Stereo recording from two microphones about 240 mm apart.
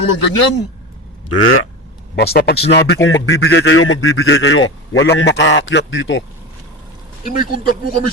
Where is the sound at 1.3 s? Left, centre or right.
Left.